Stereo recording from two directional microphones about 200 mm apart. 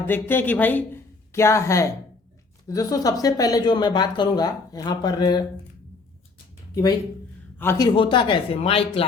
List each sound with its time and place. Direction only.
0.0 s speech: 10° left (ahead or behind)
7.6 s speech: 15° left (ahead or behind)